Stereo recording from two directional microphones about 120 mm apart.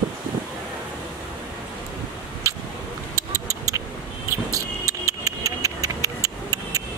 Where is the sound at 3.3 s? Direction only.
25° right (ahead or behind).